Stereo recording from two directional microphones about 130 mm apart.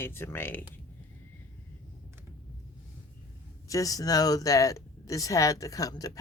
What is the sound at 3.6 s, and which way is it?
Speech, 25° left (ahead or behind).